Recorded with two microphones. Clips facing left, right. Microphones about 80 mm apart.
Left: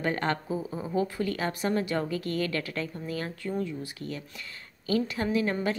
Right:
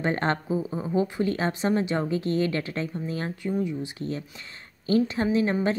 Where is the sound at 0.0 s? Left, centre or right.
Right.